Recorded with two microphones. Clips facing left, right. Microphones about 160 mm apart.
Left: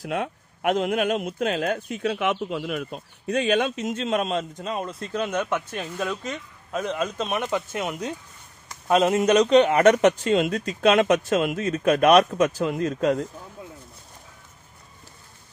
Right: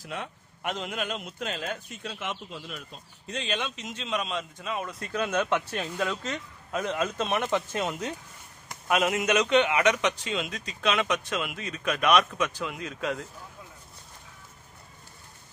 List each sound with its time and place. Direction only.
0.0 s a man's voice: 55° left (ahead or behind); by 4.8 s 40° left (ahead or behind)
4.8 s speech: 20° left (ahead or behind)
8.8 s a man's voice: 30° left (ahead or behind)